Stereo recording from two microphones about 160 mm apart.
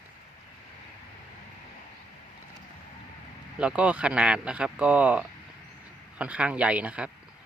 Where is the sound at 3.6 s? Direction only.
5° right (ahead or behind).